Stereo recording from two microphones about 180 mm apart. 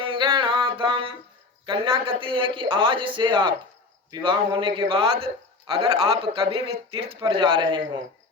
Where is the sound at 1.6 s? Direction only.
30° right (ahead or behind).